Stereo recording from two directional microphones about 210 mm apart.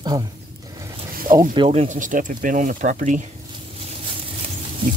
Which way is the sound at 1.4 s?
25° right (ahead or behind).